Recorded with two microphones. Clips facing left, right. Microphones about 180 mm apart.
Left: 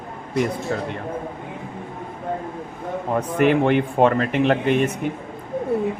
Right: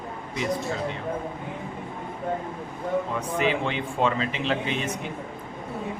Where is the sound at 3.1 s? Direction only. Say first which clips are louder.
Left 7 dB; 55° left (ahead or behind).